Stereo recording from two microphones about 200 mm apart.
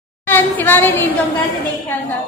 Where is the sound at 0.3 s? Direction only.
10° left (ahead or behind).